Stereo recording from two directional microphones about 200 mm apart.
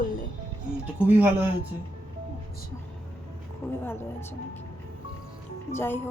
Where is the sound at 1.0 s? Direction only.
10° right (ahead or behind).